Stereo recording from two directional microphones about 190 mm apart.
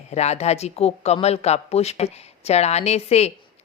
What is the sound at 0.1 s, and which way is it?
Speech, 35° left (ahead or behind).